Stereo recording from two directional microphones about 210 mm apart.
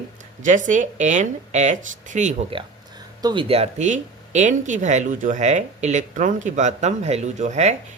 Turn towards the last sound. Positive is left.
turn(degrees=-35)  # may be behind; listen again after turning